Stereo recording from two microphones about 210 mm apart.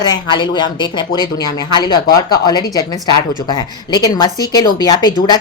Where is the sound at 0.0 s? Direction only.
20° left (ahead or behind).